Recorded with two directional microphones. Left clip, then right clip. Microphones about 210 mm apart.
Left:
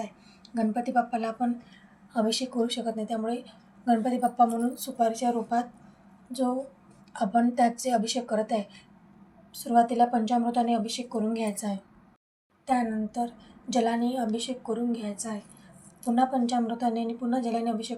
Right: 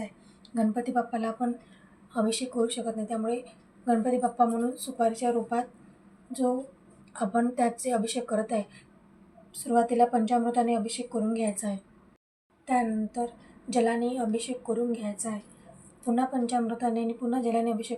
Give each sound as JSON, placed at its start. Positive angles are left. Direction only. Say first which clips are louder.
{"t": 0.5, "sound": "a woman's voice", "louder": "left 2 dB", "side_deg": 25}
{"t": 7.1, "sound": "a woman's voice", "louder": "left 2 dB", "side_deg": 20}